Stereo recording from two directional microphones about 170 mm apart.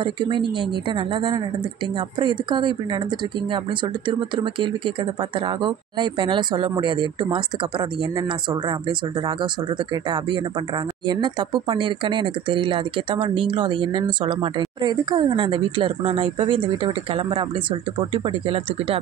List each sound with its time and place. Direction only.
0.0 s speech: 30° right (ahead or behind)